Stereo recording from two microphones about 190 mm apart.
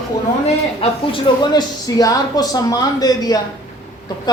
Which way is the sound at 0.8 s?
25° left (ahead or behind).